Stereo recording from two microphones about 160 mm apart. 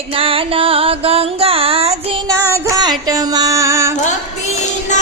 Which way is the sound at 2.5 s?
20° right (ahead or behind).